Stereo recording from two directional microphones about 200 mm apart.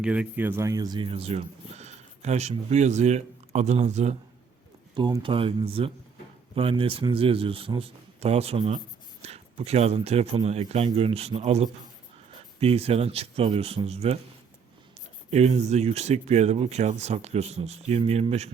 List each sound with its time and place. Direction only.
0.0 s speech: 5° right (ahead or behind); by 4.2 s 35° right (ahead or behind)
4.9 s speech: 25° right (ahead or behind)
15.3 s speech: 35° right (ahead or behind)